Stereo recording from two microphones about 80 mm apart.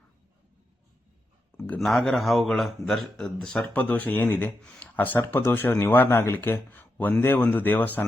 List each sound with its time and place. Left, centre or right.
1.8 s a man's voice: centre; by 8.0 s left